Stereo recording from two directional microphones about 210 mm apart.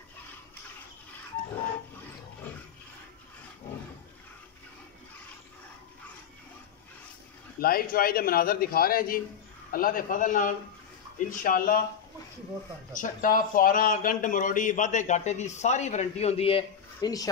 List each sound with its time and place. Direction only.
7.6 s a man's voice: 45° left (ahead or behind)
12.9 s speech: 40° left (ahead or behind); by 17.3 s 20° left (ahead or behind)